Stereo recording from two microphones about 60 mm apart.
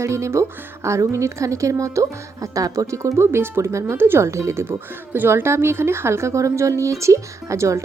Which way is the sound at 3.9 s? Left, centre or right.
Right.